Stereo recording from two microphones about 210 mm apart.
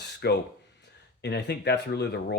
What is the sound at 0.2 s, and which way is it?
Speech, 50° left (ahead or behind).